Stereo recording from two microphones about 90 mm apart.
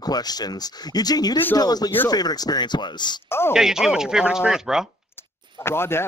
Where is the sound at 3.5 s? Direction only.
5° right (ahead or behind).